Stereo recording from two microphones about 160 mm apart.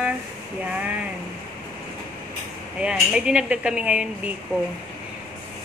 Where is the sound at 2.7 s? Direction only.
5° right (ahead or behind).